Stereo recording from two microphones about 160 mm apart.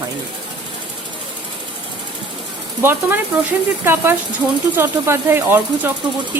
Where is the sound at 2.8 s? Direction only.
15° right (ahead or behind).